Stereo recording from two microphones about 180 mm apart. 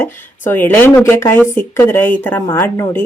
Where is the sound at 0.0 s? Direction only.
10° left (ahead or behind).